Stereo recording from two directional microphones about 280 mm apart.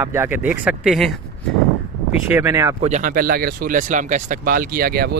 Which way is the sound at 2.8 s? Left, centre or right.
Right.